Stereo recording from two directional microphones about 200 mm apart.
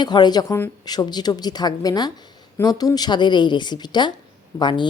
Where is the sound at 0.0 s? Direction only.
20° left (ahead or behind).